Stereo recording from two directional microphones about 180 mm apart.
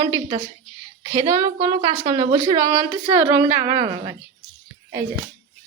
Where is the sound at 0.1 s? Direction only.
25° right (ahead or behind).